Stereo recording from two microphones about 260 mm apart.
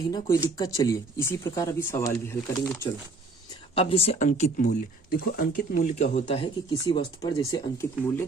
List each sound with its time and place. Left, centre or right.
0.4 s speech: centre